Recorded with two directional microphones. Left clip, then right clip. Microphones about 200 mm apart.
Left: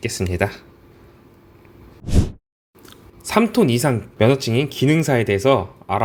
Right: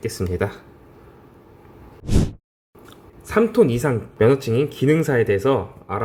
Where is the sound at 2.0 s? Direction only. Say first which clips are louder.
Right 1 dB; centre (ahead or behind).